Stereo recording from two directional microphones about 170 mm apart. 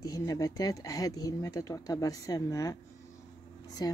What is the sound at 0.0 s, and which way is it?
Speech, 20° left (ahead or behind).